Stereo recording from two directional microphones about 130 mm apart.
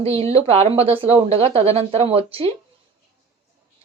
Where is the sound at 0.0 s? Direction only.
50° right (ahead or behind).